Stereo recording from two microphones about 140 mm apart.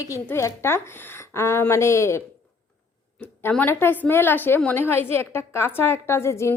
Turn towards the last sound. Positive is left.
turn(degrees=20)  # may be behind; listen again after turning